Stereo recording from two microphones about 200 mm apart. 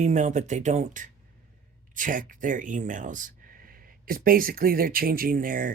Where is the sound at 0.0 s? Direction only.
35° right (ahead or behind).